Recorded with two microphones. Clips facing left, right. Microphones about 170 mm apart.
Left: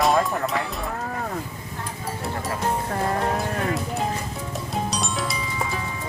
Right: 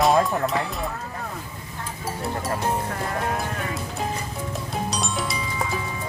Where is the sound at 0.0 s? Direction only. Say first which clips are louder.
Right 1 dB; centre (ahead or behind).